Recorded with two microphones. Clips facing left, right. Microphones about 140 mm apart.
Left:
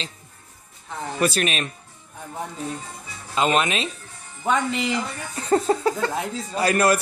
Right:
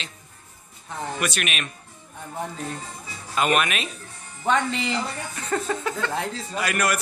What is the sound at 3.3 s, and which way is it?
Speech, 25° left (ahead or behind).